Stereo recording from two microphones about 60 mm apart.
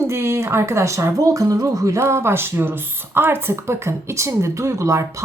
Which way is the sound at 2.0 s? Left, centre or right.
Right.